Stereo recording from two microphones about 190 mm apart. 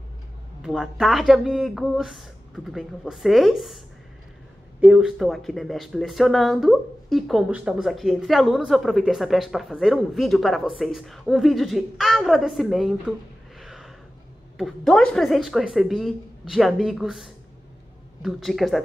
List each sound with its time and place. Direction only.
0.6 s speech: 5° right (ahead or behind)
13.6 s a sound: centre (ahead or behind)
14.6 s speech: 5° left (ahead or behind)